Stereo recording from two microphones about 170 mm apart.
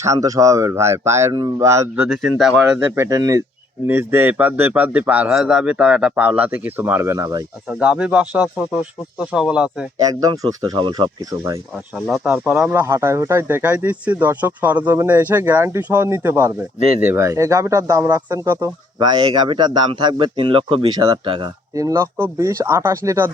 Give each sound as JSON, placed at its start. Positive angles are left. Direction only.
{"t": 0.0, "sound": "speech", "side_deg": -20}
{"t": 2.0, "sound": "speech", "side_deg": 0}
{"t": 2.9, "sound": "a man's voice", "side_deg": -15}
{"t": 7.7, "sound": "speech", "side_deg": -5}
{"t": 10.2, "sound": "a man's voice", "side_deg": -20}
{"t": 11.9, "sound": "speech", "side_deg": -5}
{"t": 12.8, "sound": "speech", "side_deg": -15}
{"t": 18.9, "sound": "a man's voice", "side_deg": -25}